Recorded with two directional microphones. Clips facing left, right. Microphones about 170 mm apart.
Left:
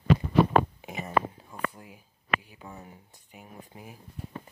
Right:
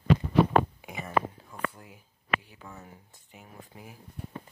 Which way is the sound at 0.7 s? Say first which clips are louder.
Left 1 dB; 20° left (ahead or behind).